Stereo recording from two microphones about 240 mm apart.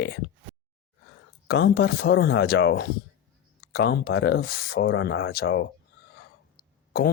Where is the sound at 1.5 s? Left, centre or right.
Left.